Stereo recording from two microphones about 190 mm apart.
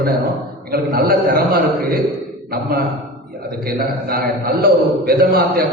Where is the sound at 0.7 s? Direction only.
55° right (ahead or behind).